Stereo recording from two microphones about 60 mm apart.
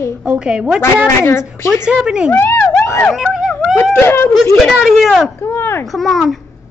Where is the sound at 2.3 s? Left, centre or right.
Left.